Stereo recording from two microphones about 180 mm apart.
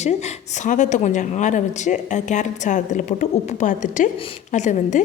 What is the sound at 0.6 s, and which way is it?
A woman's voice, 45° left (ahead or behind).